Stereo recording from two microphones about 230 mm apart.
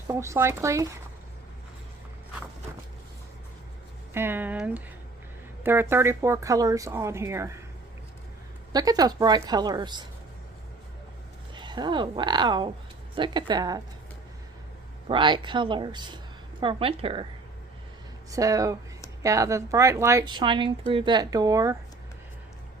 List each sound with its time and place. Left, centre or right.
0.1 s speech: centre
4.1 s speech: centre
8.7 s speech: centre
11.5 s a woman's voice: centre
15.0 s a woman's voice: right
18.3 s speech: centre